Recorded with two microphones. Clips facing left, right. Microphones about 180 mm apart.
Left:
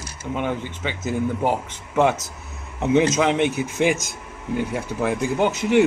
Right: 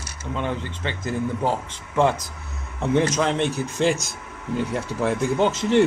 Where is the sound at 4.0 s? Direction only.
5° left (ahead or behind).